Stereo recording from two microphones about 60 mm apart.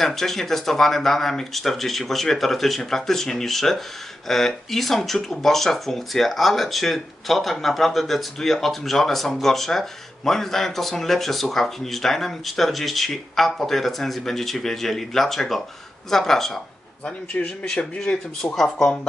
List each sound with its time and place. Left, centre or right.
0.0 s speech: centre
17.0 s speech: centre
18.5 s speech: centre